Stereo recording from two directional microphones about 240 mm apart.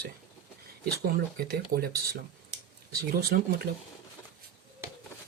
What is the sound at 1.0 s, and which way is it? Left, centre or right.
Speech, right.